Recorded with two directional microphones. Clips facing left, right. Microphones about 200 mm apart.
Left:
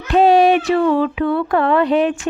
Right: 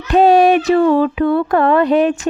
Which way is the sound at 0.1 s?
45° right (ahead or behind).